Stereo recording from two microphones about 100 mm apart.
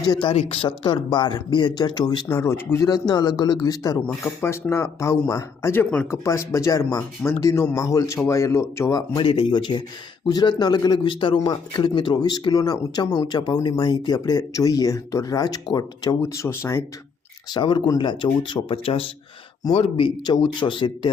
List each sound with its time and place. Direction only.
0.0 s speech: 55° left (ahead or behind)
0.3 s speech: 75° left (ahead or behind); by 2.2 s 40° left (ahead or behind)
2.2 s speech: 25° left (ahead or behind)
4.4 s speech: 25° left (ahead or behind)
6.1 s speech: 30° left (ahead or behind)
9.1 s speech: 65° left (ahead or behind); by 16.1 s 45° left (ahead or behind)
16.2 s speech: 25° left (ahead or behind)
17.5 s speech: 55° left (ahead or behind); by 20.1 s 70° left (ahead or behind)
20.2 s speech: 50° left (ahead or behind)